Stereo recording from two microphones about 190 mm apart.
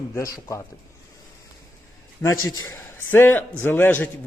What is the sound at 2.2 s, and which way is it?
A man's voice, 20° left (ahead or behind).